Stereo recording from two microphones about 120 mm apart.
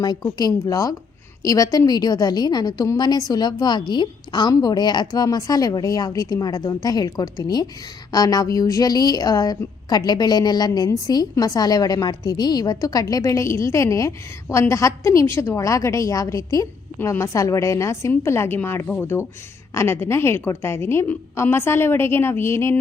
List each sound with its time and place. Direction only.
0.0 s a woman's voice: 35° left (ahead or behind)